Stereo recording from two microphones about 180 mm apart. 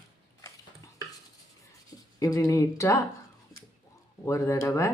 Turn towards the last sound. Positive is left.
turn(degrees=15)  # may be behind; listen again after turning